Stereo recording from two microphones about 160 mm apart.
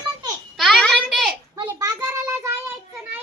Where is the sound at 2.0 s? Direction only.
15° right (ahead or behind).